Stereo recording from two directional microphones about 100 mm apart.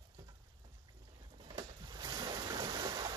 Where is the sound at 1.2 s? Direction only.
45° right (ahead or behind).